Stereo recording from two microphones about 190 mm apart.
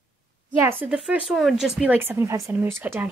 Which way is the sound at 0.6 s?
10° right (ahead or behind).